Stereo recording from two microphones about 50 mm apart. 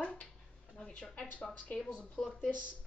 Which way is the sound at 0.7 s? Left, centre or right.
Centre.